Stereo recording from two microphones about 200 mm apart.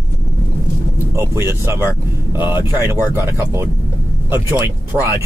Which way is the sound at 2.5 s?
20° left (ahead or behind).